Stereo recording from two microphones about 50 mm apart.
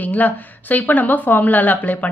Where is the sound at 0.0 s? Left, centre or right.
Left.